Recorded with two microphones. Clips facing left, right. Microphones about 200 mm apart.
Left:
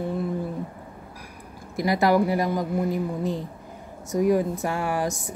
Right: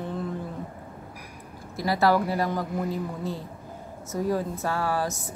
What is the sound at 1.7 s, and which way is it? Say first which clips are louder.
Speech: left 2 dB; 15° left (ahead or behind).